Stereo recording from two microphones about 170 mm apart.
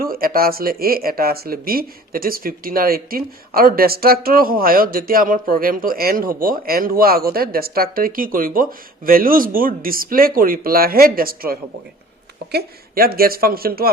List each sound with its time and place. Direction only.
0.0 s speech: 60° right (ahead or behind)